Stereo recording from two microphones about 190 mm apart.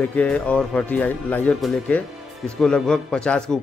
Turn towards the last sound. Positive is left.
turn(degrees=5)  # may be behind; listen again after turning